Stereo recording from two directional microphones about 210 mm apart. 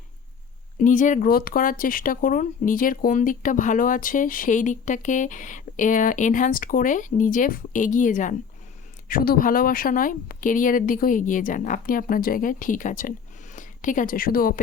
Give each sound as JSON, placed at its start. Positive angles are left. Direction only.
{"t": 0.8, "sound": "speech", "side_deg": 40}